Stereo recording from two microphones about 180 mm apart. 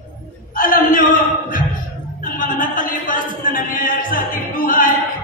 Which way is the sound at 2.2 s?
50° left (ahead or behind).